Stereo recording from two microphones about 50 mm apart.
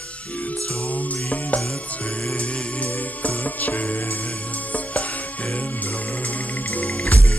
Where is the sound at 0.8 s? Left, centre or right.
Left.